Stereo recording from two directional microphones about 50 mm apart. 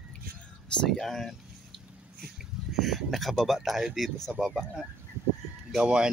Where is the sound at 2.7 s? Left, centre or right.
Centre.